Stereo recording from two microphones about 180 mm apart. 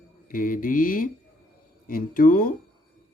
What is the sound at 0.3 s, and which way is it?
Speech, 50° left (ahead or behind).